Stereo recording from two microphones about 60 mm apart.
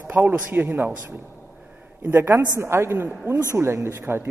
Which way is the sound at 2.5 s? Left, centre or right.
Right.